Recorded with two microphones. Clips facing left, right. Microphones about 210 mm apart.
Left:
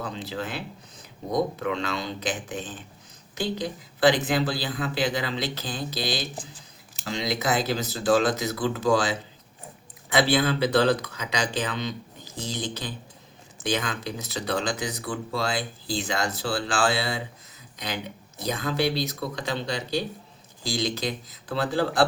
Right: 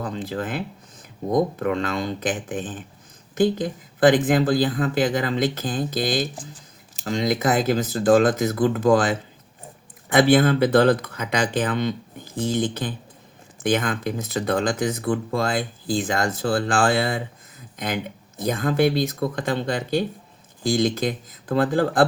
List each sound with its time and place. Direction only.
0.0 s speech: 50° right (ahead or behind)